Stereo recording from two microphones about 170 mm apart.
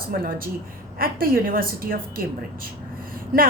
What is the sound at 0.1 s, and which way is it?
A woman's voice, 60° right (ahead or behind).